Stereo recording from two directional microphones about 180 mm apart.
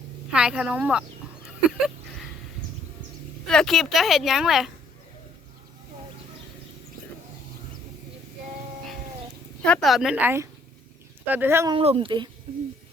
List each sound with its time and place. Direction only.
0.3 s a woman's voice: 5° right (ahead or behind)
3.4 s a woman's voice: 5° left (ahead or behind)
9.6 s a woman's voice: 5° left (ahead or behind); by 11.7 s 15° right (ahead or behind)
11.7 s speech: 30° right (ahead or behind)